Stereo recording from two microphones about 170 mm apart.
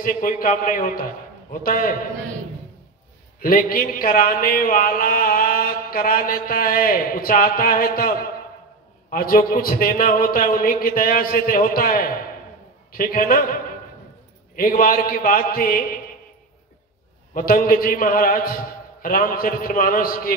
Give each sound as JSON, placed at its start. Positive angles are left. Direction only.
{"t": 0.0, "sound": "a man's voice", "side_deg": 55}
{"t": 3.3, "sound": "a man's voice", "side_deg": 55}
{"t": 17.3, "sound": "a man's voice", "side_deg": 55}